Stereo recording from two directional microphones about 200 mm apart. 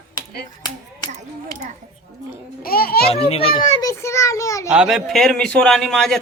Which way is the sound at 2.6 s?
50° left (ahead or behind).